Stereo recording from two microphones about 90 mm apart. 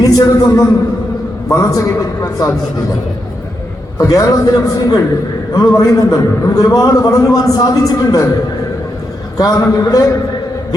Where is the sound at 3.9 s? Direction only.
35° left (ahead or behind).